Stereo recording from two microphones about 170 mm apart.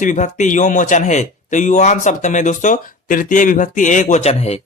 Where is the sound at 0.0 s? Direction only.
45° left (ahead or behind).